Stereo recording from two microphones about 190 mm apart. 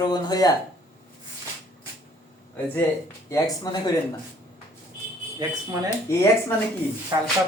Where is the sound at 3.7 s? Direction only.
20° left (ahead or behind).